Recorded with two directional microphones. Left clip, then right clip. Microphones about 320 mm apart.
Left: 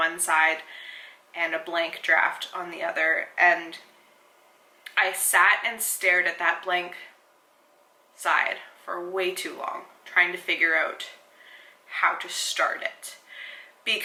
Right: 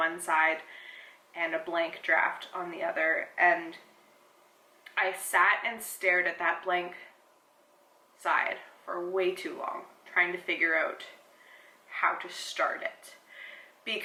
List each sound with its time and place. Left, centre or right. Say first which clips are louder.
0.0 s speech: left 5 dB; centre
5.0 s a woman's voice: left 5 dB; centre
8.2 s speech: left 5 dB; centre
8.9 s a woman's voice: left 2 dB; centre